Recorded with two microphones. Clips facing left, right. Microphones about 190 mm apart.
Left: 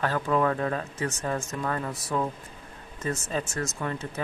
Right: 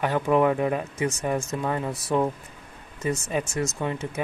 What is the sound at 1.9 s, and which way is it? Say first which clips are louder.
Speech: right 5 dB; 25° right (ahead or behind).